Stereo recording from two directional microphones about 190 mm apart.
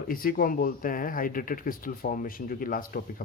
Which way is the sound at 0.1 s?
50° left (ahead or behind).